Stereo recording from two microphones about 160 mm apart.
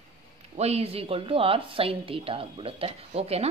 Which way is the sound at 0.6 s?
40° right (ahead or behind).